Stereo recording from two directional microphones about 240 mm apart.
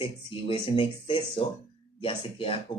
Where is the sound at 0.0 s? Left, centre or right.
Left.